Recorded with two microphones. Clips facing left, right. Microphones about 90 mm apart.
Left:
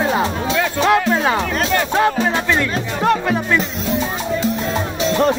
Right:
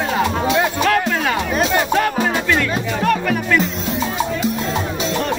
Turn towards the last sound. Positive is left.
turn(degrees=25)  # may be behind; listen again after turning